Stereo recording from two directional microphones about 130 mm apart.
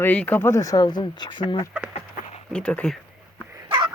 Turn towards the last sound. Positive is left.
turn(degrees=-40)  # may be behind; listen again after turning